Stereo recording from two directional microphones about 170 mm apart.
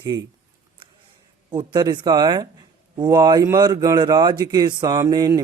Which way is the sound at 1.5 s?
25° right (ahead or behind).